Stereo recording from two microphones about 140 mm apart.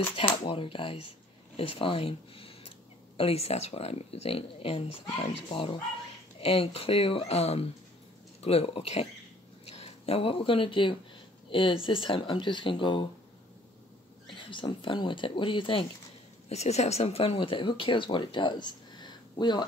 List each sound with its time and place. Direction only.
0.1 s speech: 40° left (ahead or behind)
14.3 s speech: 35° left (ahead or behind)
16.4 s speech: 50° left (ahead or behind); by 19.6 s 30° left (ahead or behind)